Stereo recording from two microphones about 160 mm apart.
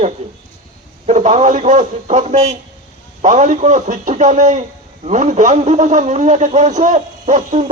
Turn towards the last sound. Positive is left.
turn(degrees=-50)  # may be behind; listen again after turning